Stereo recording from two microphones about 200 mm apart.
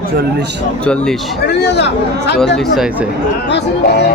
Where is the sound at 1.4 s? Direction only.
55° left (ahead or behind).